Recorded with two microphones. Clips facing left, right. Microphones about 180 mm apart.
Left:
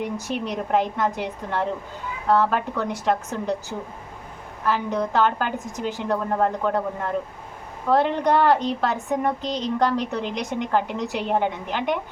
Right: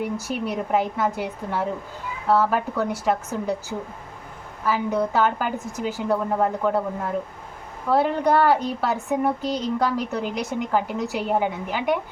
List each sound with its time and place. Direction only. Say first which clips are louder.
0.0 s a woman's voice: right 1 dB; 5° right (ahead or behind)